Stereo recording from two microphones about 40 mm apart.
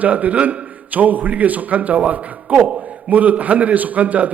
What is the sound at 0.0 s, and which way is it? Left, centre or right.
A man's voice, right.